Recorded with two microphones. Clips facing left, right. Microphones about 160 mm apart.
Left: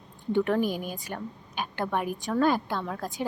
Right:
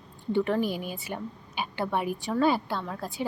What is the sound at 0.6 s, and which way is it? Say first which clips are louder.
Speech: left 1 dB; 45° left (ahead or behind).